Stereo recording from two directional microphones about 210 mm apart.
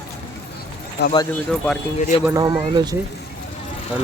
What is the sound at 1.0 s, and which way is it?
Speech, 50° left (ahead or behind).